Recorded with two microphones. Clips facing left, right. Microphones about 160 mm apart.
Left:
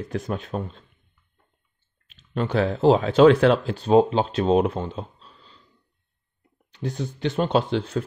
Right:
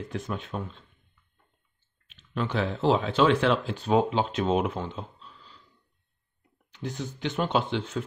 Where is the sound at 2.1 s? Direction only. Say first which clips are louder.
Left 4 dB; 40° left (ahead or behind).